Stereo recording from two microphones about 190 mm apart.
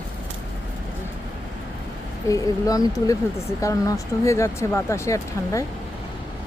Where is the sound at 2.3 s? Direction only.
20° left (ahead or behind).